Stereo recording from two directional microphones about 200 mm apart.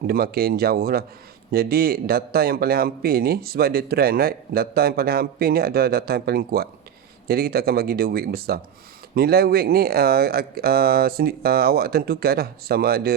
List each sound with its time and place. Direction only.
0.1 s speech: 50° right (ahead or behind)